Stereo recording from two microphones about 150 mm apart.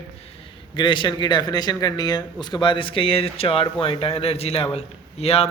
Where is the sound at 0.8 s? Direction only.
30° left (ahead or behind).